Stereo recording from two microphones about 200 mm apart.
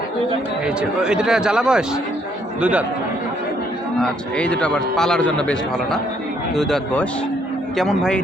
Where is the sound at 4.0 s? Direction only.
5° left (ahead or behind).